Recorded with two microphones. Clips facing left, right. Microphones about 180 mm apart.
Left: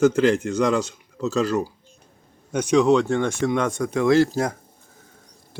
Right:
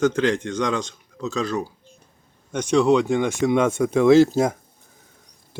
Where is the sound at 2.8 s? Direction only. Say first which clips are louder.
Right 2 dB; 10° right (ahead or behind).